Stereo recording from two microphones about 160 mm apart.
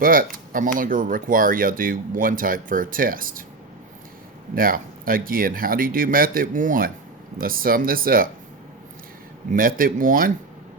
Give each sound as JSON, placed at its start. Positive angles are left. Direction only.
{"t": 0.0, "sound": "speech", "side_deg": -60}
{"t": 4.5, "sound": "speech", "side_deg": -60}
{"t": 9.5, "sound": "speech", "side_deg": -60}